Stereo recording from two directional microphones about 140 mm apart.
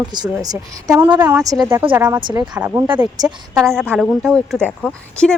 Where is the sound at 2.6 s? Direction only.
15° right (ahead or behind).